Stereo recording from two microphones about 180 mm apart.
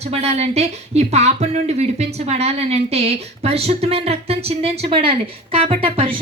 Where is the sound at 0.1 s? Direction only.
35° right (ahead or behind).